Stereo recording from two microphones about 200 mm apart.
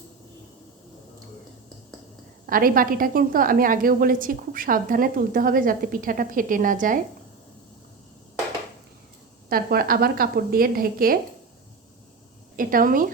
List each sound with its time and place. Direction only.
2.5 s a woman's voice: 45° right (ahead or behind)
9.5 s a woman's voice: 50° right (ahead or behind)
12.5 s a woman's voice: 45° right (ahead or behind)